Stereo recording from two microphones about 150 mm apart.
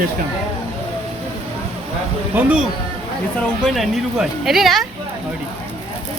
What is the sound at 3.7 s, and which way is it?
Speech, centre (ahead or behind).